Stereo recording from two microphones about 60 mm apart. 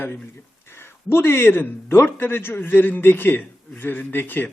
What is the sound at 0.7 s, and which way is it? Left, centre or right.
A man's voice, left.